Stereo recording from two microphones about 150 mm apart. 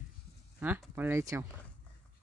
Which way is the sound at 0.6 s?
15° right (ahead or behind).